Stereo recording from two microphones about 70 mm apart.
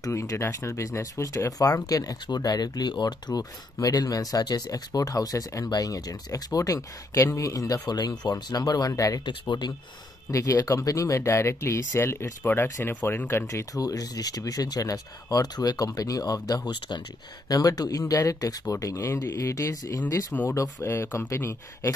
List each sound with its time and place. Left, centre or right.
0.0 s speech: left
5.7 s speech: left
9.2 s speech: left
10.3 s speech: left
13.7 s speech: left
17.5 s speech: left